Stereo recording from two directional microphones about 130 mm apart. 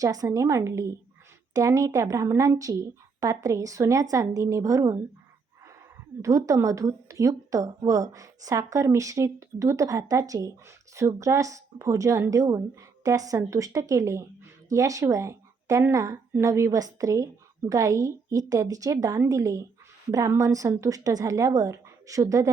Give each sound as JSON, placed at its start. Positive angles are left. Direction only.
{"t": 0.0, "sound": "a woman's voice", "side_deg": -25}
{"t": 6.2, "sound": "a woman's voice", "side_deg": -25}